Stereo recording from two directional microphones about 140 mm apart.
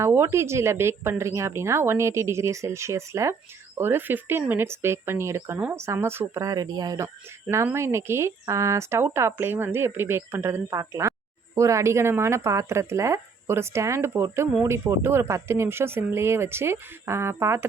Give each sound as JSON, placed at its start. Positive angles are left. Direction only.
{"t": 0.0, "sound": "speech", "side_deg": -20}